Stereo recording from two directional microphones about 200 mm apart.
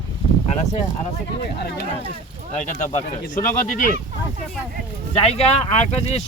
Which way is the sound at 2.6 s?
35° left (ahead or behind).